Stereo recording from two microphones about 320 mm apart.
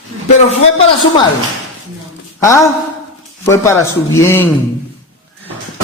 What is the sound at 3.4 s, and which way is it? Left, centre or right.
A woman's voice, centre.